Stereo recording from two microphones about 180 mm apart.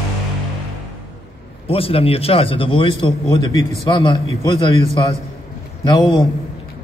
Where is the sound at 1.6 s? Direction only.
30° left (ahead or behind).